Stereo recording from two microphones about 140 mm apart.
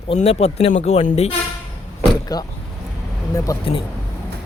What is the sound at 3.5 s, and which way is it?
Speech, 25° left (ahead or behind).